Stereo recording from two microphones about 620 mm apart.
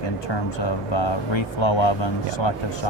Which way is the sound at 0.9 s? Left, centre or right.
Left.